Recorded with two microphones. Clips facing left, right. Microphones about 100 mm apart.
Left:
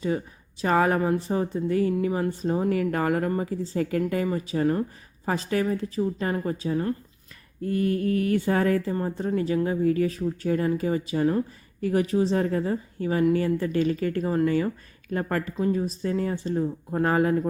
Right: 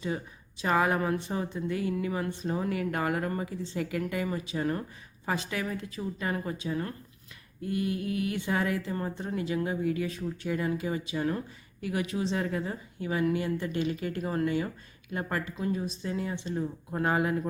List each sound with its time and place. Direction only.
0.6 s a woman's voice: 40° left (ahead or behind)
15.9 s a woman's voice: 45° left (ahead or behind)